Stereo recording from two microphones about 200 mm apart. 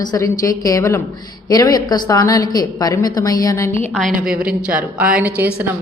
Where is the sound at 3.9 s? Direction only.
Centre (ahead or behind).